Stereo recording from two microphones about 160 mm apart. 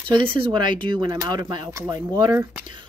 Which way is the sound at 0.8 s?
30° right (ahead or behind).